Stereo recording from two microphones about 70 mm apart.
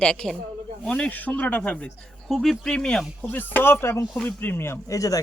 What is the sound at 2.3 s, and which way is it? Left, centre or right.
Speech, centre.